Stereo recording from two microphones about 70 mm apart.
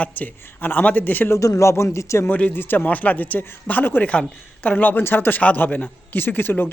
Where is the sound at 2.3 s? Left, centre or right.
Left.